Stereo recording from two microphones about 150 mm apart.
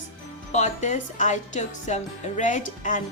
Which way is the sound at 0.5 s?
50° left (ahead or behind).